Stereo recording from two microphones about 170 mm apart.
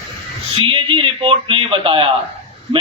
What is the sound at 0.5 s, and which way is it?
A man's voice, 30° right (ahead or behind).